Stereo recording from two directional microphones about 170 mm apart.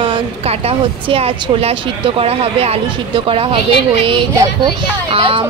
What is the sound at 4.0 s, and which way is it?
Speech, 30° right (ahead or behind).